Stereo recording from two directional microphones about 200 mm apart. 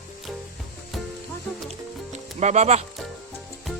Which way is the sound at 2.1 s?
35° right (ahead or behind).